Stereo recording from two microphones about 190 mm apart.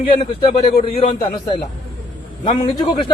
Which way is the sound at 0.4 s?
30° left (ahead or behind).